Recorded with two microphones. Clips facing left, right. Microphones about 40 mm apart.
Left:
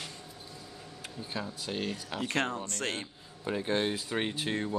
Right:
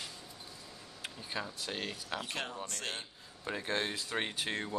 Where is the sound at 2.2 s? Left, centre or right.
Left.